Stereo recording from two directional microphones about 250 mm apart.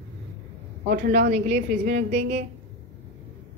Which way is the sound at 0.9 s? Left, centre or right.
Right.